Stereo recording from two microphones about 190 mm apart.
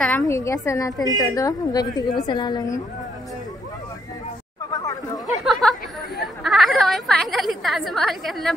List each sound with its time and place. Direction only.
0.0 s a woman's voice: 10° left (ahead or behind)
4.7 s chatter: 20° left (ahead or behind)
5.2 s chatter: centre (ahead or behind)
6.4 s a sound: centre (ahead or behind)